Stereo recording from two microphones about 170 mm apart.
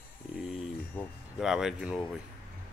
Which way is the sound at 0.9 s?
5° left (ahead or behind).